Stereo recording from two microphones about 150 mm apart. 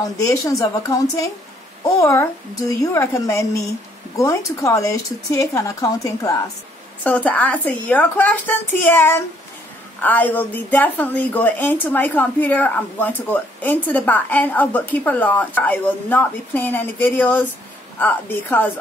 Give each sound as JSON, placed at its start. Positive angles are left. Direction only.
{"t": 0.0, "sound": "speech", "side_deg": 20}
{"t": 7.0, "sound": "a woman's voice", "side_deg": 10}